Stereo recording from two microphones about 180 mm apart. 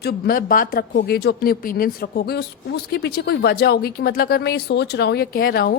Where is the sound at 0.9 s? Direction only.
65° left (ahead or behind).